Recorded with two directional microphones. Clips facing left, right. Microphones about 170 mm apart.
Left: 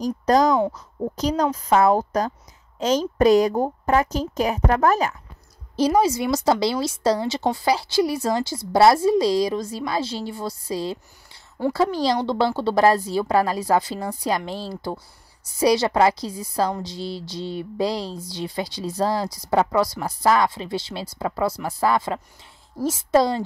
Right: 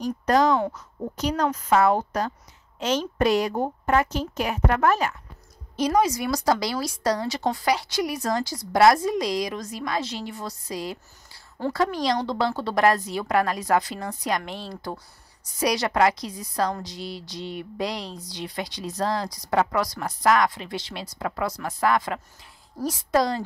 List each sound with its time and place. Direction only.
0.0 s a woman's voice: 40° left (ahead or behind)
1.3 s speech: 15° left (ahead or behind)
1.9 s a woman's voice: 40° left (ahead or behind)